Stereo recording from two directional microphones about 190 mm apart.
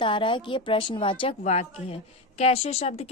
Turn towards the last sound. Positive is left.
turn(degrees=35)  # may be behind; listen again after turning